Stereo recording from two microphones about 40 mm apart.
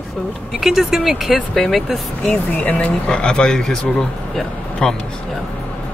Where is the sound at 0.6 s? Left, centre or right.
Centre.